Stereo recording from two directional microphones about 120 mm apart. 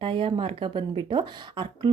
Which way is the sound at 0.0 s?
45° right (ahead or behind).